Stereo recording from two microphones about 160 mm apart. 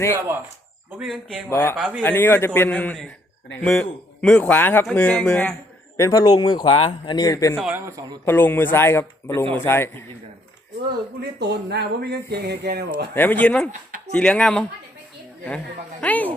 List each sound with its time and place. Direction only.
0.9 s speech: centre (ahead or behind)
1.5 s a man's voice: 15° left (ahead or behind)
1.7 s a man's voice: 10° right (ahead or behind)
2.0 s a man's voice: 10° left (ahead or behind)
6.0 s a man's voice: 20° left (ahead or behind)
7.6 s a man's voice: 15° right (ahead or behind)
8.2 s a man's voice: 15° left (ahead or behind)
11.2 s speech: 90° right
13.1 s a man's voice: 10° left (ahead or behind)